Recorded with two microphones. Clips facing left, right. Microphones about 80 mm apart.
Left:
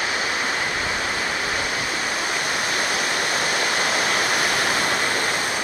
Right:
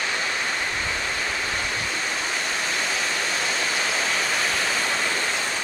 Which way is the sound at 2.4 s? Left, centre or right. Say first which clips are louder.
Left 3 dB; left.